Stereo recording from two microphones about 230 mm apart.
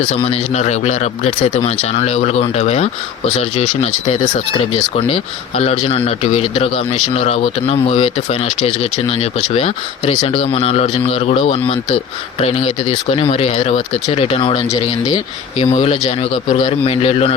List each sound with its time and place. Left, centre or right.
0.1 s speech: left
15.5 s speech: left